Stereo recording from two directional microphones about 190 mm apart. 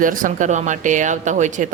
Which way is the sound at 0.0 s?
45° right (ahead or behind).